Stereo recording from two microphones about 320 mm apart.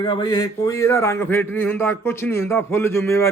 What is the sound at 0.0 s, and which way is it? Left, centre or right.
A man's voice, centre.